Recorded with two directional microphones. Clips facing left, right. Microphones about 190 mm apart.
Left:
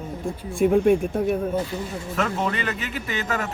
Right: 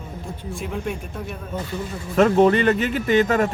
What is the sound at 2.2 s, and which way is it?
Speech, 40° right (ahead or behind).